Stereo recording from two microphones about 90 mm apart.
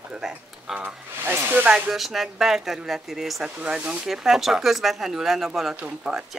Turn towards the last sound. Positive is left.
turn(degrees=-10)  # may be behind; listen again after turning